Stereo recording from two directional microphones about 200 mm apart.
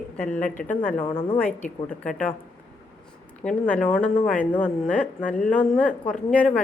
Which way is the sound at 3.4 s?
5° left (ahead or behind).